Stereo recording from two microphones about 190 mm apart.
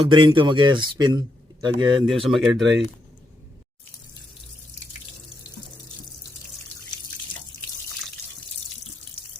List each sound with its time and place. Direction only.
0.0 s speech: 30° right (ahead or behind)
2.0 s speech: centre (ahead or behind)